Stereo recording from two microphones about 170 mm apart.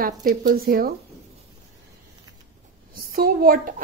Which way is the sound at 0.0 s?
60° right (ahead or behind).